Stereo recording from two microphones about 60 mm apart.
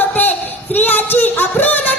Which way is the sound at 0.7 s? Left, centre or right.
Left.